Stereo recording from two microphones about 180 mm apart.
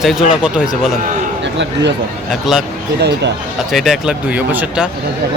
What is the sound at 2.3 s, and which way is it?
Speech, centre (ahead or behind).